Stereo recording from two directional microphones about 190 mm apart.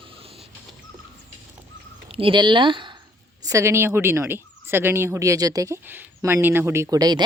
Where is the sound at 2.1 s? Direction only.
25° right (ahead or behind).